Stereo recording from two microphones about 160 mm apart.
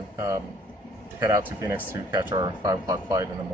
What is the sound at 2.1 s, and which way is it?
Speech, 30° right (ahead or behind).